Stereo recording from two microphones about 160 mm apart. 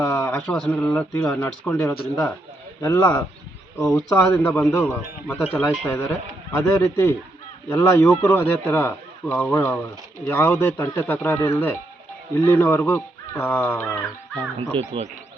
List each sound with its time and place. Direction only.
0.0 s speech: 15° left (ahead or behind)
3.8 s speech: 5° left (ahead or behind)
4.1 s speech: 15° left (ahead or behind)